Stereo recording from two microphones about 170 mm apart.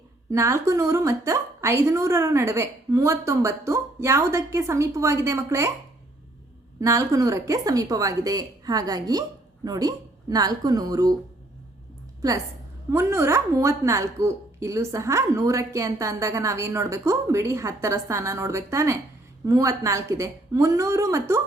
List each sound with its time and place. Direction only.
0.3 s a woman's voice: 15° right (ahead or behind)
6.7 s a woman's voice: 20° right (ahead or behind)
12.2 s a woman's voice: 20° right (ahead or behind)